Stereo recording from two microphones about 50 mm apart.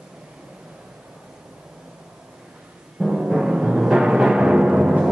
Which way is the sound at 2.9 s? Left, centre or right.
Centre.